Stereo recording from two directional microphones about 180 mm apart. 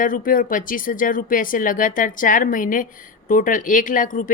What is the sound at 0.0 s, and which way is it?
Speech, 50° left (ahead or behind).